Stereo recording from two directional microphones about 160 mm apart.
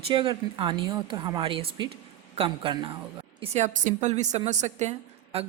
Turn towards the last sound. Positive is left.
turn(degrees=-40)  # may be behind; listen again after turning